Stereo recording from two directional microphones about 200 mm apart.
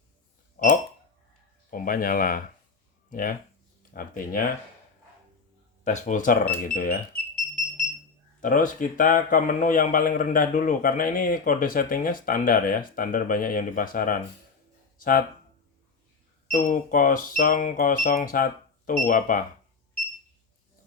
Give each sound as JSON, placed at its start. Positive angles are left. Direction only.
{"t": 1.7, "sound": "speech", "side_deg": 45}
{"t": 5.8, "sound": "speech", "side_deg": 40}
{"t": 8.4, "sound": "speech", "side_deg": 40}
{"t": 16.5, "sound": "speech", "side_deg": 40}